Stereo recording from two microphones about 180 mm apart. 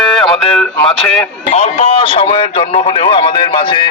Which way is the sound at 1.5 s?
35° left (ahead or behind).